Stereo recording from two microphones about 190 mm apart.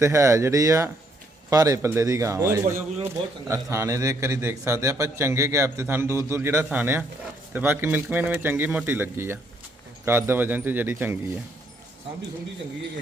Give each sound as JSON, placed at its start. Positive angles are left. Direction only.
{"t": 0.0, "sound": "a man's voice", "side_deg": -15}